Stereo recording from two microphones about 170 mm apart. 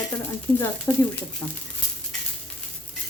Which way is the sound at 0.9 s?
10° left (ahead or behind).